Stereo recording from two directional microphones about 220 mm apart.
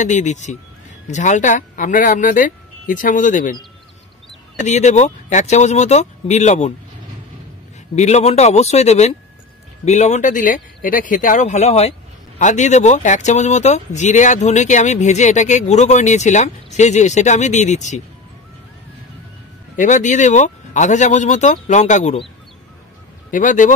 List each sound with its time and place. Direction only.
0.0 s speech: 35° left (ahead or behind)
4.6 s speech: 30° left (ahead or behind)
7.9 s speech: 30° left (ahead or behind)
19.8 s speech: 35° left (ahead or behind)
23.3 s speech: 35° left (ahead or behind)